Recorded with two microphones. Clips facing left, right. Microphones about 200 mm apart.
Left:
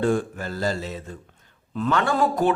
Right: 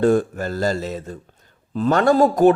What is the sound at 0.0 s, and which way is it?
Speech, 40° right (ahead or behind).